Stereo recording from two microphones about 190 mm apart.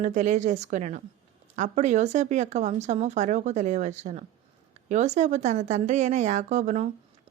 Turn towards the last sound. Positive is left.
turn(degrees=-40)  # may be behind; listen again after turning